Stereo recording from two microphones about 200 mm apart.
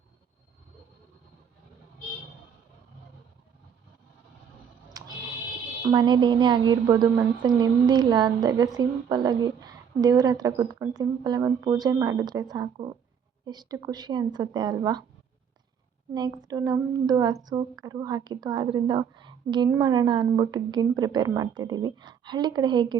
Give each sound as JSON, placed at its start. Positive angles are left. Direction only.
{"t": 4.9, "sound": "a sound", "side_deg": -20}
{"t": 5.8, "sound": "a woman's voice", "side_deg": -20}
{"t": 16.1, "sound": "a woman's voice", "side_deg": -20}